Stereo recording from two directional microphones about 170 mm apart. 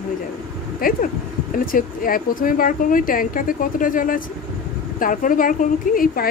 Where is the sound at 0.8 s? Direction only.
60° left (ahead or behind).